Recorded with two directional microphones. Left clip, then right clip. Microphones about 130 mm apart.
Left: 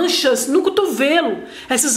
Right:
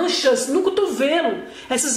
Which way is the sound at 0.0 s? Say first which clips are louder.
Left 2 dB; 40° left (ahead or behind).